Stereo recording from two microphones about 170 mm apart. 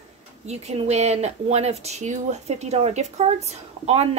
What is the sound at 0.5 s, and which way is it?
Speech, 40° right (ahead or behind).